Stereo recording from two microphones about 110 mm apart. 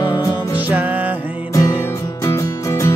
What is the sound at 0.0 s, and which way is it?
Music, 45° left (ahead or behind).